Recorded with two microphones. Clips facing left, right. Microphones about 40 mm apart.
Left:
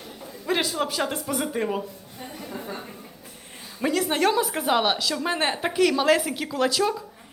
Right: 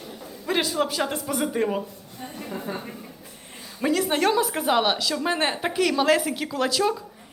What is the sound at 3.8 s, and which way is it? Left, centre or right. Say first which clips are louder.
A woman's voice: even; centre.